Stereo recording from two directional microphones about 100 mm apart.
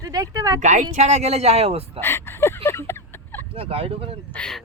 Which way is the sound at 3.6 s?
75° right (ahead or behind).